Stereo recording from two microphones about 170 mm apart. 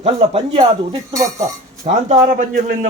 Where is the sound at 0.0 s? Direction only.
35° right (ahead or behind).